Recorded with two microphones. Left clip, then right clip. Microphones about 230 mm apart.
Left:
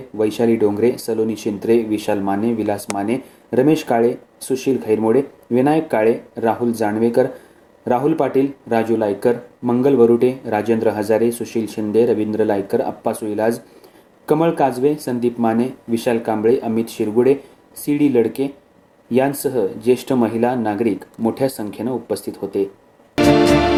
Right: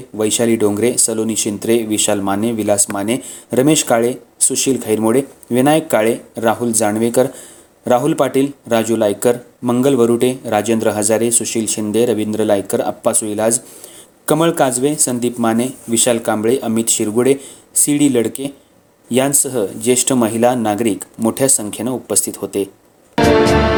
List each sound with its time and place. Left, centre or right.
0.2 s speech: right
23.1 s music: centre